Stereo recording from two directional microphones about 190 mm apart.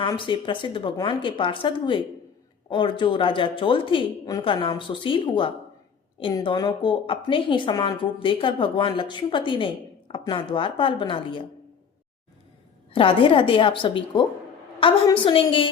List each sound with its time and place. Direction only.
0.0 s a woman's voice: 25° left (ahead or behind)
12.9 s a woman's voice: 30° left (ahead or behind)